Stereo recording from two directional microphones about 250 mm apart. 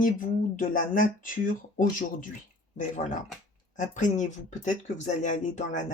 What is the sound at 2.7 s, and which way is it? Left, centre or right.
Speech, left.